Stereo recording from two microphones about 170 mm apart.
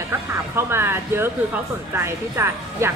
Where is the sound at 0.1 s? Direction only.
15° right (ahead or behind).